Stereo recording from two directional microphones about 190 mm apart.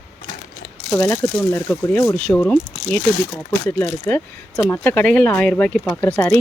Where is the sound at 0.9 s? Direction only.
10° left (ahead or behind).